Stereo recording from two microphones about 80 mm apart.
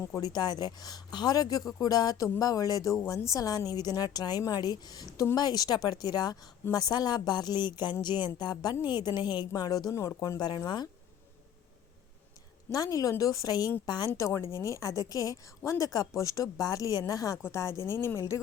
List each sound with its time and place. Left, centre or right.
0.0 s speech: left
0.3 s a woman's voice: left
8.4 s a woman's voice: left
9.6 s a woman's voice: left
9.9 s speech: left
10.2 s a woman's voice: left
12.7 s a woman's voice: left
14.2 s a woman's voice: left